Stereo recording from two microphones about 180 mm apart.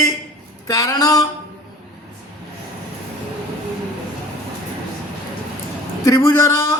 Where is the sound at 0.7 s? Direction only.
20° left (ahead or behind).